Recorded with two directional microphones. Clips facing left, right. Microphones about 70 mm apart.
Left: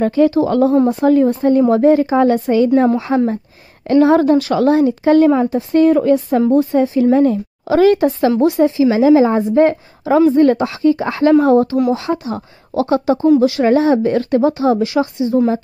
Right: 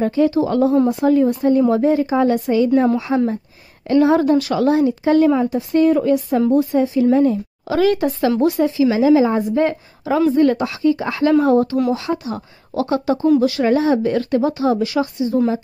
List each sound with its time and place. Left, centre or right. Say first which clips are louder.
0.0 s a woman's voice: left 3 dB; left
7.7 s speech: left 5 dB; left
8.9 s speech: left 3 dB; left